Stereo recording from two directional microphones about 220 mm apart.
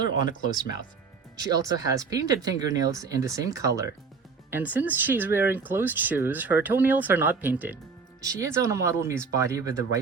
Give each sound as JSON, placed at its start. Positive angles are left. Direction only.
{"t": 1.4, "sound": "speech", "side_deg": -15}